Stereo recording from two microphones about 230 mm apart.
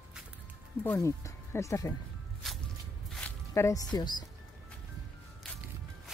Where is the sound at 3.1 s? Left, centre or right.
Centre.